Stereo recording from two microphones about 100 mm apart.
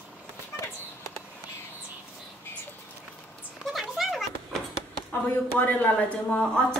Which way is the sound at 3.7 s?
Centre (ahead or behind).